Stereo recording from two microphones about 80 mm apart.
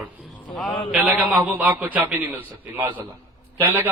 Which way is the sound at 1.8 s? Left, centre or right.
Right.